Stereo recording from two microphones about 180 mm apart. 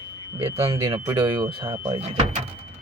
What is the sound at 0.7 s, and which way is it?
Speech, 20° right (ahead or behind).